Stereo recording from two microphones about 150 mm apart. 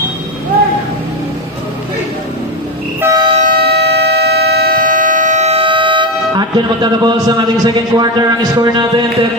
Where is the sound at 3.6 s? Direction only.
90° right.